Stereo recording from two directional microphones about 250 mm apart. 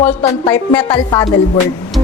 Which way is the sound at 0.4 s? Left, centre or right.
Centre.